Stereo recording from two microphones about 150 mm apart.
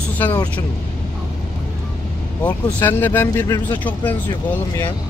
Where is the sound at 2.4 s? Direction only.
10° left (ahead or behind).